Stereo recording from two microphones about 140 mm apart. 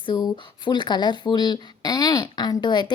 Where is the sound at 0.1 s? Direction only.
30° left (ahead or behind).